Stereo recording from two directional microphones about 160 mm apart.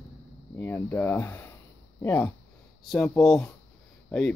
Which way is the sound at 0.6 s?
10° left (ahead or behind).